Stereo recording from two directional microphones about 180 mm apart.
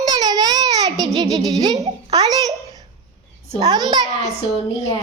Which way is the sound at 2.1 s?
20° right (ahead or behind).